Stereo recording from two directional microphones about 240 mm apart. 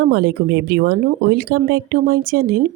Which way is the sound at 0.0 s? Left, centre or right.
Right.